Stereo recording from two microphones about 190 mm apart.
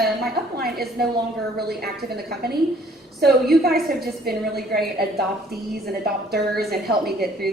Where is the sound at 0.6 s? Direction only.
55° right (ahead or behind).